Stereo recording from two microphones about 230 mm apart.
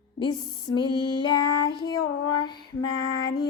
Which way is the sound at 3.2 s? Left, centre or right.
Left.